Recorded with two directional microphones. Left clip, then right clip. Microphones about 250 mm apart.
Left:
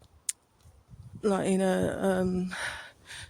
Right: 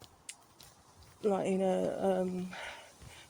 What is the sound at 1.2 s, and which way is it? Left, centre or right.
Speech, left.